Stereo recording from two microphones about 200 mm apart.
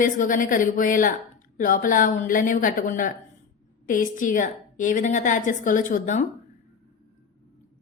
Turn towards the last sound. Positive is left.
turn(degrees=40)  # may be behind; listen again after turning